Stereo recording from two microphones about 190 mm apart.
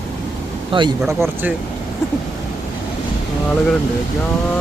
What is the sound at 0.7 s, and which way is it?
Speech, 25° right (ahead or behind).